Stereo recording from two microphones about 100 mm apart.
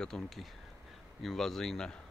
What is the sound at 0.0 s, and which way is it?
Speech, 5° left (ahead or behind).